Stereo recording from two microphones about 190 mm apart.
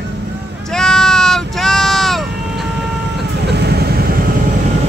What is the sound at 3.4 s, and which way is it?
Vehicle, 55° right (ahead or behind).